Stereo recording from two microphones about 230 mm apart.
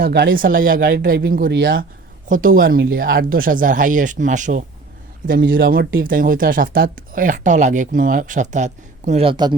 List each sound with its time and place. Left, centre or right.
0.0 s speech: right
5.4 s speech: right; by 9.6 s centre